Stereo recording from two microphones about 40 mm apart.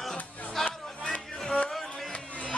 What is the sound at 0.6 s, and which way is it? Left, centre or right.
Music, centre.